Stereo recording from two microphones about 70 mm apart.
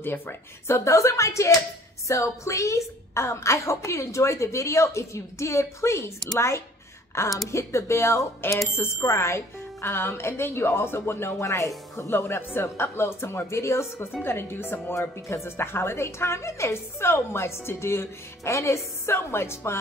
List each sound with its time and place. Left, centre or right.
0.0 s a woman's voice: left
15.0 s speech: left